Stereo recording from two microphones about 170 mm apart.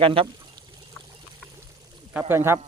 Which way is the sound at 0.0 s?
35° right (ahead or behind).